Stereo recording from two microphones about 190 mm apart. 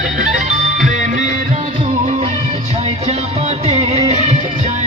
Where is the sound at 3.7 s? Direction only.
35° right (ahead or behind).